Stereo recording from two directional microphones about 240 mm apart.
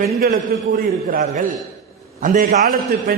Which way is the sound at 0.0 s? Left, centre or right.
Right.